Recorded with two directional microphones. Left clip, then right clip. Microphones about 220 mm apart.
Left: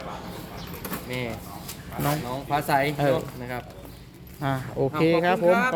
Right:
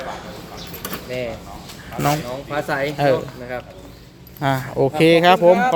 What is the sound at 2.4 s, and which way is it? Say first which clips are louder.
Speech: even; 45° left (ahead or behind).